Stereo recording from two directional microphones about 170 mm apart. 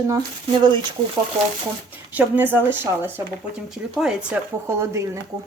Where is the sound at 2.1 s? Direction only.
10° right (ahead or behind).